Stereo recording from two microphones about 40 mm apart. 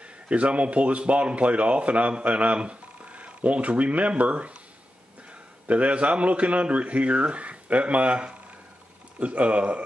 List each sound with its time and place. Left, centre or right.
0.3 s speech: right
5.7 s speech: right